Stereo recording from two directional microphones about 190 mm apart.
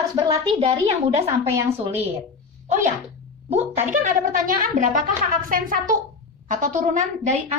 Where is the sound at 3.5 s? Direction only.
40° right (ahead or behind).